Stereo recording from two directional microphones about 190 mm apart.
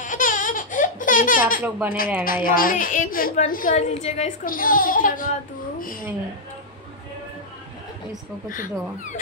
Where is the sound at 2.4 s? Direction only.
50° left (ahead or behind).